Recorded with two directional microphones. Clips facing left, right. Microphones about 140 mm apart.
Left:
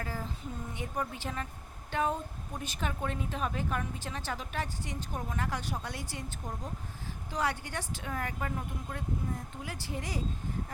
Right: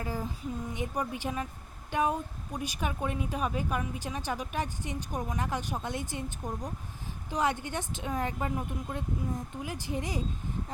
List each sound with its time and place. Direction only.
0.0 s a woman's voice: 15° right (ahead or behind)